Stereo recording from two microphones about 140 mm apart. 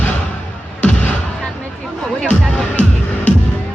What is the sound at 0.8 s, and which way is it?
Music, 10° left (ahead or behind).